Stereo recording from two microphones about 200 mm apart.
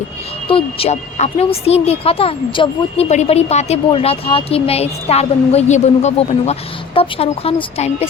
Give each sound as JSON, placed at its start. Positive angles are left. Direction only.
{"t": 0.4, "sound": "speech", "side_deg": 25}